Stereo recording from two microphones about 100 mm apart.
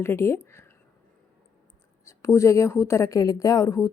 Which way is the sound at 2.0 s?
30° left (ahead or behind).